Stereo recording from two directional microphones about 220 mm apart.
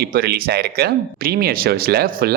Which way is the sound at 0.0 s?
45° right (ahead or behind).